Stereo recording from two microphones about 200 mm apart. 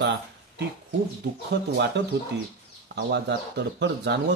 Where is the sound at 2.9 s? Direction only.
55° right (ahead or behind).